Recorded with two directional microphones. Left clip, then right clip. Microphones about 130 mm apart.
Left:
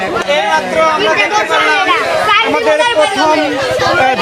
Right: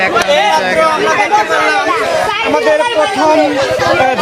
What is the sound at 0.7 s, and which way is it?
Speech, 10° right (ahead or behind).